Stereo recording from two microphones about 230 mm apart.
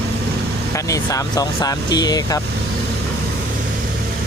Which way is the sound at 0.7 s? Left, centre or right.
Centre.